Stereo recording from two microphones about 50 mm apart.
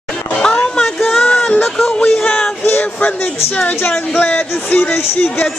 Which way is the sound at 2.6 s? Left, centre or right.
Left.